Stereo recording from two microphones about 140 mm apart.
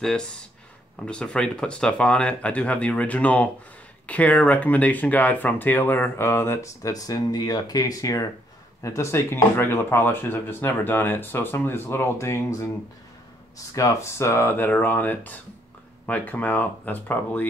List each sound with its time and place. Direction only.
1.0 s speech: 5° left (ahead or behind)
13.7 s speech: 20° left (ahead or behind)